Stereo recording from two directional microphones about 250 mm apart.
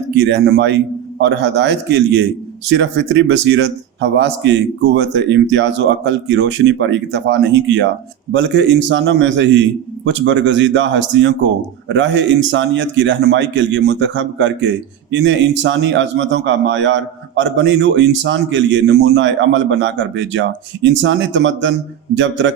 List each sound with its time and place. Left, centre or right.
0.2 s a man's voice: right